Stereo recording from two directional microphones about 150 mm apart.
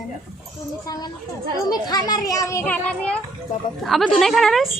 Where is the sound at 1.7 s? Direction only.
25° left (ahead or behind).